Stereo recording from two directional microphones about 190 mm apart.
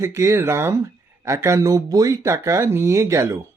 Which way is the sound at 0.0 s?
15° right (ahead or behind).